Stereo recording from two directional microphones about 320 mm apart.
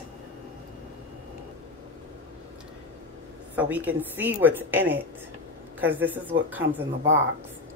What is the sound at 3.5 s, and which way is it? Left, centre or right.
A woman's voice, centre.